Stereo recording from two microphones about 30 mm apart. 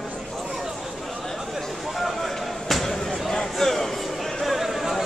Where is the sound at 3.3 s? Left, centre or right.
Left.